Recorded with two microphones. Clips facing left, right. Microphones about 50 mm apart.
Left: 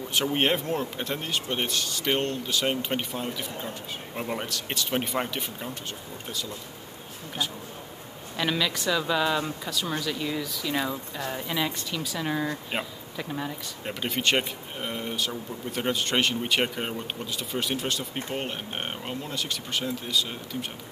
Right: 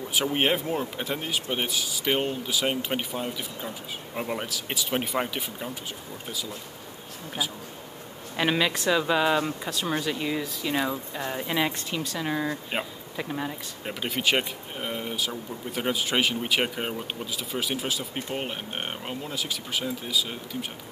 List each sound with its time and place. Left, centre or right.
0.1 s speech: centre
8.4 s speech: right
12.0 s speech: centre